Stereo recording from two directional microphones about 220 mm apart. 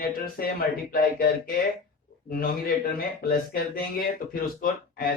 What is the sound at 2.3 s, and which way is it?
A man's voice, 40° left (ahead or behind).